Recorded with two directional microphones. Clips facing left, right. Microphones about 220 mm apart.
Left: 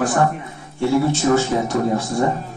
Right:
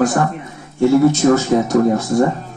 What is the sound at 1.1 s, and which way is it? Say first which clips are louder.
Speech: right 4 dB; 40° right (ahead or behind).